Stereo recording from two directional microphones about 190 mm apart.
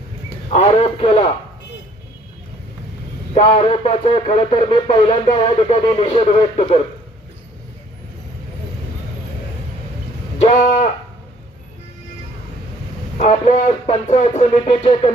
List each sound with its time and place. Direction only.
0.5 s speech: 30° left (ahead or behind)
3.3 s speech: 30° left (ahead or behind)
10.3 s a sound: 40° left (ahead or behind)
13.1 s speech: 35° left (ahead or behind)